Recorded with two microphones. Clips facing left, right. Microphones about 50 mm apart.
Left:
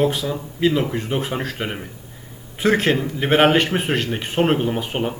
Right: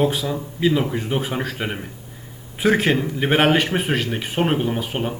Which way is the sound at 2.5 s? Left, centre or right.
Centre.